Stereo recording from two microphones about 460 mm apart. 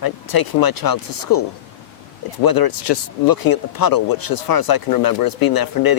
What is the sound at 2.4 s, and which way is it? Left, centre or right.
Speech, left.